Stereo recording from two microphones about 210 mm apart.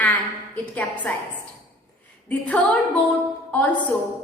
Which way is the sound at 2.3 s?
5° left (ahead or behind).